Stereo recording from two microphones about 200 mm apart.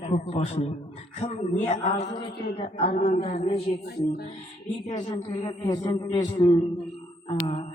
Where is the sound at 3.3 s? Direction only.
30° left (ahead or behind).